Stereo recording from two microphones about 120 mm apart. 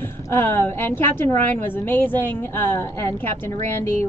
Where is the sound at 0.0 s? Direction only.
20° left (ahead or behind).